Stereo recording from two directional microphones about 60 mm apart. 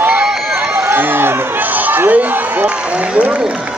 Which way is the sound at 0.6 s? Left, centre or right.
Right.